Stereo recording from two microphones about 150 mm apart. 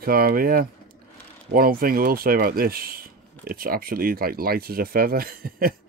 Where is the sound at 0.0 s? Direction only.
80° right.